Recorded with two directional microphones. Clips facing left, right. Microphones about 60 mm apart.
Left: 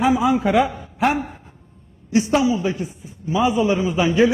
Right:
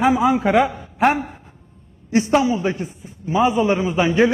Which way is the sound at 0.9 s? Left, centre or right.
Right.